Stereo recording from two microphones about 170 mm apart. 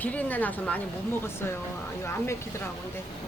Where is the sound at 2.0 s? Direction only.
15° left (ahead or behind).